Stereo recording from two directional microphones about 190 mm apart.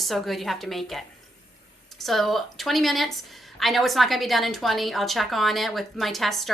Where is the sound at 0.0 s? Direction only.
Centre (ahead or behind).